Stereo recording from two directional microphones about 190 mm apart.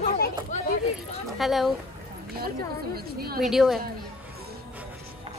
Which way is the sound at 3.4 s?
Centre (ahead or behind).